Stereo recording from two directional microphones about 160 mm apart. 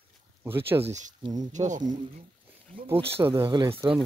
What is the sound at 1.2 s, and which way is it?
Speech, 25° right (ahead or behind).